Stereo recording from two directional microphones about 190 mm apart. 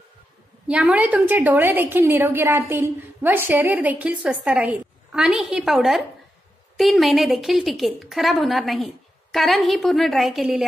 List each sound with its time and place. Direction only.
0.7 s a woman's voice: 5° right (ahead or behind)